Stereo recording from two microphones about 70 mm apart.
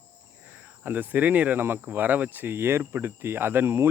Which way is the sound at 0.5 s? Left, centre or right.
Right.